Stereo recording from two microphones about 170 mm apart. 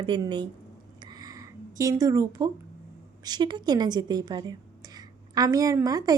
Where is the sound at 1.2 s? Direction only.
20° right (ahead or behind).